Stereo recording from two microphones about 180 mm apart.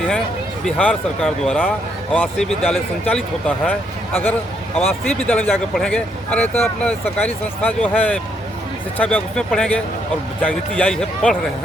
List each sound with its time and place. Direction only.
0.6 s speech: 5° left (ahead or behind)